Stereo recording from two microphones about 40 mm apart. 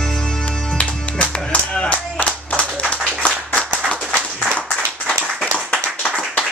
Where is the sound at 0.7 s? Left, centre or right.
Left.